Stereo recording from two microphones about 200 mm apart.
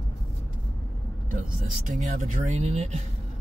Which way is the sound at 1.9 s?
40° right (ahead or behind).